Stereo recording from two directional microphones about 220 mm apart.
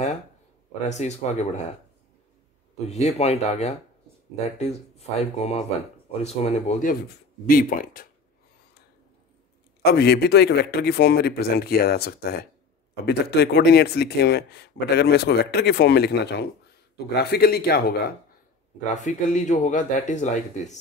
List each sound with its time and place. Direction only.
0.8 s speech: 30° left (ahead or behind)
2.9 s speech: 30° left (ahead or behind)
9.9 s speech: 45° left (ahead or behind)
18.9 s speech: 35° left (ahead or behind)